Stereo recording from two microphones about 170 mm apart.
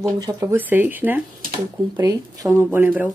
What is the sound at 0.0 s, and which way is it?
Speech, 20° right (ahead or behind).